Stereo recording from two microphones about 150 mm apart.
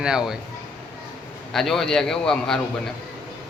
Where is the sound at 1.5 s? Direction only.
Centre (ahead or behind).